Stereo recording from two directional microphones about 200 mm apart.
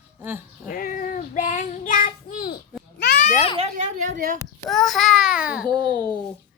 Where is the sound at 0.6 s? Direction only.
40° left (ahead or behind).